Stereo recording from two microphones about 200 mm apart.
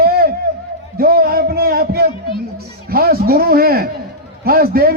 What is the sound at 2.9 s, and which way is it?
A man's voice, 50° right (ahead or behind).